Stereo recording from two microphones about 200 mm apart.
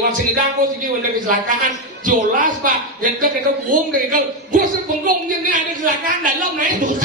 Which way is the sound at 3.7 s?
40° right (ahead or behind).